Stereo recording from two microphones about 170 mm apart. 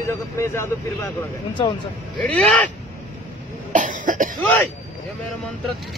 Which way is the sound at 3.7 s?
50° right (ahead or behind).